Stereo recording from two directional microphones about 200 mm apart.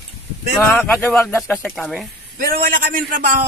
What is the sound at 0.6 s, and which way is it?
Speech, 10° left (ahead or behind).